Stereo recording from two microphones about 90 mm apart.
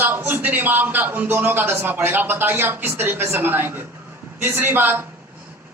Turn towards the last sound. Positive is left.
turn(degrees=-20)  # may be behind; listen again after turning